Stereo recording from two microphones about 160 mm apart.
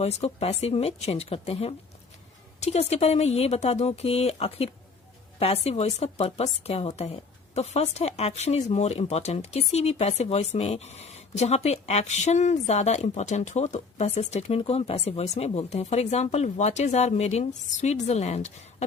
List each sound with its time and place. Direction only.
0.0 s a woman's voice: 40° left (ahead or behind)